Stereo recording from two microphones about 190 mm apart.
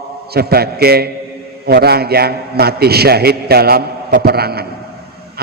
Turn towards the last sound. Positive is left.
turn(degrees=-55)  # may be behind; listen again after turning